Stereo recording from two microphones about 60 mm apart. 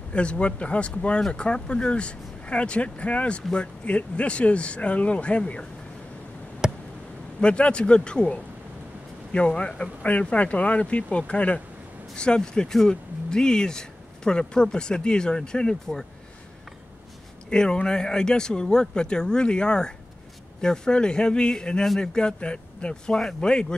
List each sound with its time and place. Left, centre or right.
0.1 s speech: centre
6.6 s a sound: centre
7.3 s speech: centre
17.5 s speech: centre